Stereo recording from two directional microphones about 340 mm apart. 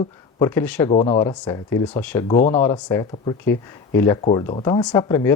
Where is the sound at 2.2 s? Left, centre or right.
Centre.